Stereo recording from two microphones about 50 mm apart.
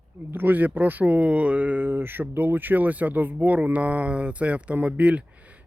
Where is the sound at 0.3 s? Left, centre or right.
Right.